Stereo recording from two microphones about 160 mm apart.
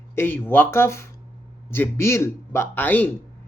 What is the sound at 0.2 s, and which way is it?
A man's voice, 15° left (ahead or behind).